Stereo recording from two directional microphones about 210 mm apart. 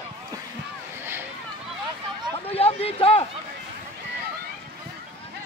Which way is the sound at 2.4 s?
30° left (ahead or behind).